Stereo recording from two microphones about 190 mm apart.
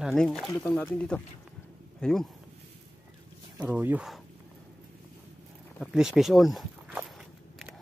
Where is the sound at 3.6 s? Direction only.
10° right (ahead or behind).